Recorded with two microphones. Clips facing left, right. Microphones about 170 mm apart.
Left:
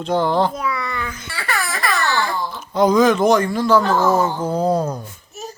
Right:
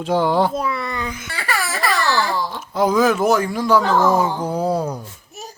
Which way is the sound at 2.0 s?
90° right.